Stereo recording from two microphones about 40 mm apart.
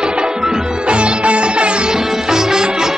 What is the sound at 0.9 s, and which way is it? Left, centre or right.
Music, right.